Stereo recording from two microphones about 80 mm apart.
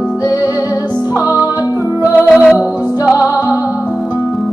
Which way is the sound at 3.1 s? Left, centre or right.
Left.